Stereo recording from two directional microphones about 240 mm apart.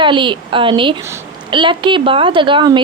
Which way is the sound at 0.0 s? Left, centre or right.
Centre.